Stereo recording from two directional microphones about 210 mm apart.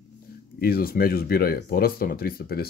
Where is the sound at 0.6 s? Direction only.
45° left (ahead or behind).